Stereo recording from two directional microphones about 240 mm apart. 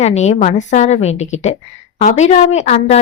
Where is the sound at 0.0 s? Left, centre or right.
Left.